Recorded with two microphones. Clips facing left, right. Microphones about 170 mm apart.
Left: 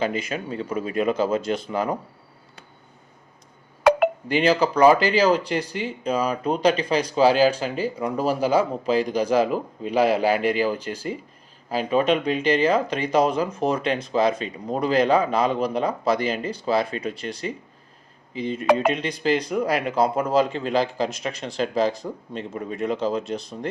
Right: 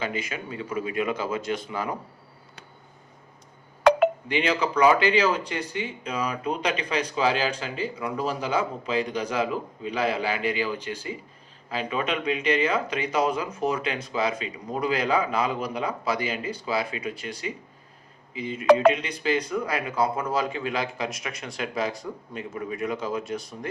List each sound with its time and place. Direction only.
0.0 s speech: 35° left (ahead or behind)
4.3 s speech: 40° left (ahead or behind)
16.9 s speech: 10° right (ahead or behind)
18.3 s speech: 35° left (ahead or behind)
18.6 s speech: 5° left (ahead or behind)
18.9 s speech: 35° left (ahead or behind)
19.5 s speech: 15° left (ahead or behind)
20.6 s speech: 30° left (ahead or behind)